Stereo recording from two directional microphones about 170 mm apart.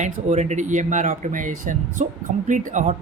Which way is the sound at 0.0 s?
45° right (ahead or behind).